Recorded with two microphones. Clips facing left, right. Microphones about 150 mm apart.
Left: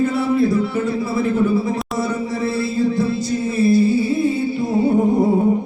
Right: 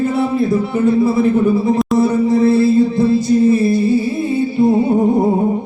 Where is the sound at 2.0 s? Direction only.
25° right (ahead or behind).